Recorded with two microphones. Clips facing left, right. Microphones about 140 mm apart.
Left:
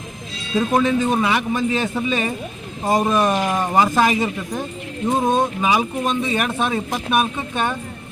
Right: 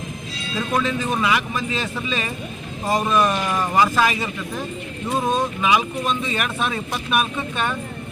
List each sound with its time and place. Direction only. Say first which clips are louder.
0.5 s speech: left 5 dB; 25° left (ahead or behind)
3.0 s speech: even; 35° left (ahead or behind)
3.3 s speech: left 2 dB; 20° left (ahead or behind)
5.6 s speech: left 1 dB; 30° left (ahead or behind)